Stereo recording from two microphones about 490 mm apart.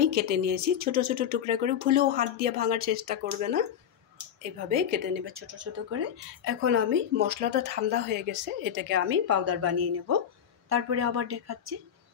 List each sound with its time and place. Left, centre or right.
0.0 s speech: centre
4.6 s speech: right